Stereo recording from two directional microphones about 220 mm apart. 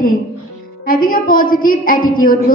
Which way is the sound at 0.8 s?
40° left (ahead or behind).